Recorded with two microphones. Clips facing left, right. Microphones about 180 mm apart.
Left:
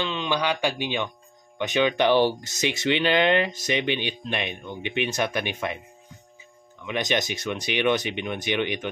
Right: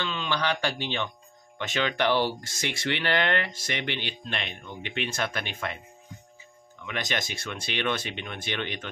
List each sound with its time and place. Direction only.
0.0 s speech: 20° left (ahead or behind)
6.9 s speech: 20° left (ahead or behind)